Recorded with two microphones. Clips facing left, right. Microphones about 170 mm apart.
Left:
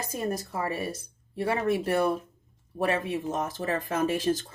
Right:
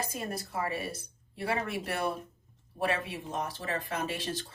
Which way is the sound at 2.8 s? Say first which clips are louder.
Left 5 dB; 45° left (ahead or behind).